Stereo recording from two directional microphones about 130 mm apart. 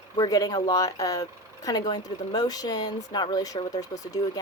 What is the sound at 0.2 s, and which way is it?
A woman's voice, 30° left (ahead or behind).